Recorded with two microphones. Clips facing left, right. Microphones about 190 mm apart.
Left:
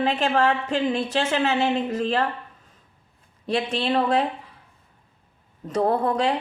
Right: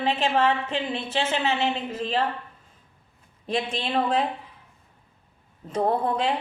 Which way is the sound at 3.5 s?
40° left (ahead or behind).